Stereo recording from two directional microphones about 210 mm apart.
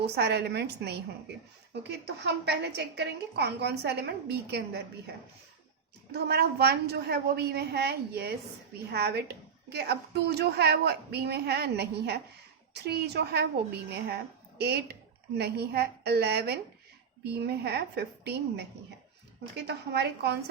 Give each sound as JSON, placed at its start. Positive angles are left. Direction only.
{"t": 0.0, "sound": "a woman's voice", "side_deg": -50}
{"t": 6.1, "sound": "a woman's voice", "side_deg": -50}
{"t": 19.6, "sound": "a woman's voice", "side_deg": -50}